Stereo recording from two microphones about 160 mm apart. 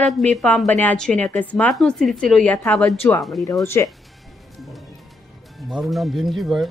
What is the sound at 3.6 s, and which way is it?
Speech, 15° left (ahead or behind).